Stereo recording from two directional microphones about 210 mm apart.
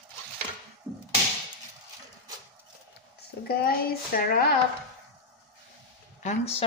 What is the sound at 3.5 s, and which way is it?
A child's voice, 45° left (ahead or behind).